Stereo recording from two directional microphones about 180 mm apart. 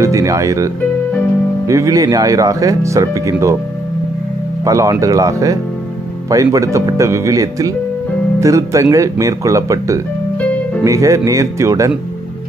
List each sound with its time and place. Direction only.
0.0 s speech: 15° right (ahead or behind)
1.7 s speech: 20° right (ahead or behind)
4.6 s speech: 20° right (ahead or behind)